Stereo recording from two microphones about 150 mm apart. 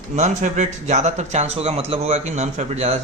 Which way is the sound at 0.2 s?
50° right (ahead or behind).